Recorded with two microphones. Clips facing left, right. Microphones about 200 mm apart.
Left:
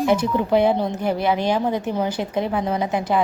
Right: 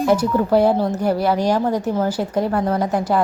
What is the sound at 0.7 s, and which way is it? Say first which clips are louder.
A woman's voice: right 3 dB; 5° right (ahead or behind).